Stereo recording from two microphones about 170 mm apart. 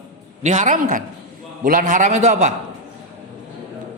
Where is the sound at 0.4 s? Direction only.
45° right (ahead or behind).